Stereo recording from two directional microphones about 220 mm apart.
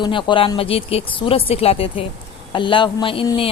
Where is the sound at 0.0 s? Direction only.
20° left (ahead or behind).